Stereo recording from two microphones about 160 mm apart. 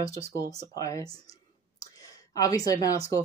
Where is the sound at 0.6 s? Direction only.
20° left (ahead or behind).